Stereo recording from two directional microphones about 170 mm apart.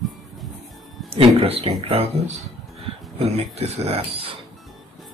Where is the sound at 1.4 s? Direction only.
35° right (ahead or behind).